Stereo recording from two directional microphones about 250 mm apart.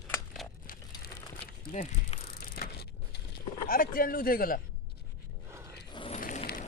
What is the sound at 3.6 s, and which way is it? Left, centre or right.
Speech, left.